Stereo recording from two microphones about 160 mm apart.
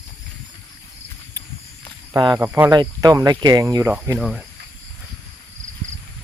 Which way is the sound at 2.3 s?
15° right (ahead or behind).